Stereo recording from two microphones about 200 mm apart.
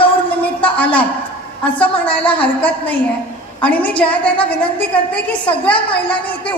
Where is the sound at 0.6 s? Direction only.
5° left (ahead or behind).